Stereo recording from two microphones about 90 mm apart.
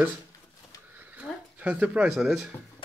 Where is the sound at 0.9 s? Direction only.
15° right (ahead or behind).